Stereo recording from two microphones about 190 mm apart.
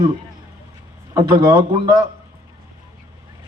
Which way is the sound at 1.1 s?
20° right (ahead or behind).